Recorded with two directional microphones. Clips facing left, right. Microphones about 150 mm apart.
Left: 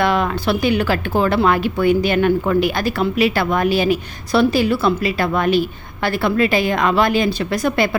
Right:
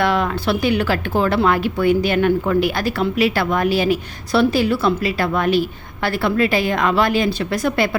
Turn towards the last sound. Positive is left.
turn(degrees=20)  # may be behind; listen again after turning